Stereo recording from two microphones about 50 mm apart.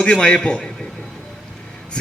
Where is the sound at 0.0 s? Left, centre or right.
Centre.